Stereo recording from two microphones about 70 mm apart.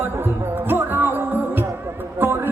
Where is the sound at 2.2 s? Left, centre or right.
Right.